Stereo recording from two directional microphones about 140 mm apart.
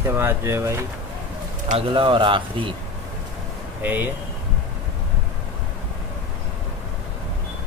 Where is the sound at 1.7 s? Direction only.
40° right (ahead or behind).